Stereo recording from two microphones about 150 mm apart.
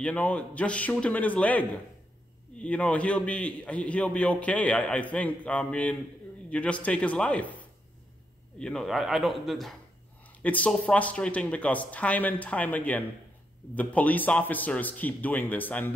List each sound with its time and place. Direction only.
0.0 s a man's voice: 10° left (ahead or behind)
2.6 s a man's voice: 10° left (ahead or behind)
8.5 s a man's voice: 5° left (ahead or behind)